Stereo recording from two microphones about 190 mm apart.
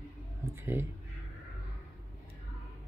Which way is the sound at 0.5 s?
10° right (ahead or behind).